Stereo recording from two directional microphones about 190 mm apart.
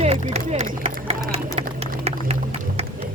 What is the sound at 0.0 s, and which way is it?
Speech, 35° right (ahead or behind).